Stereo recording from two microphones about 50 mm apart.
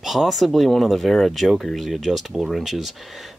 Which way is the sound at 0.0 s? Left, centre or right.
Centre.